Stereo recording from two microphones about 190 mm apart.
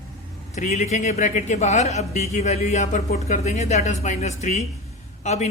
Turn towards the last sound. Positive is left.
turn(degrees=35)  # may be behind; listen again after turning